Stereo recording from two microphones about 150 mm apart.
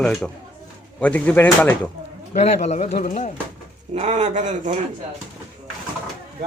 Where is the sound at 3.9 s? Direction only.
50° right (ahead or behind).